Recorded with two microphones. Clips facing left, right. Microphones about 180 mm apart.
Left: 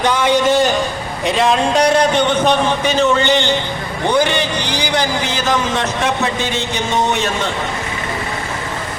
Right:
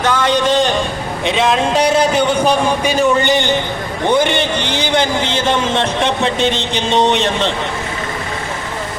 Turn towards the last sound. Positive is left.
turn(degrees=-25)  # may be behind; listen again after turning